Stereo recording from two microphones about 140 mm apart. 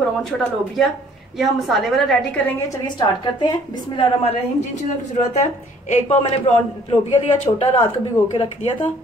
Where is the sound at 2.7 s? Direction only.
30° left (ahead or behind).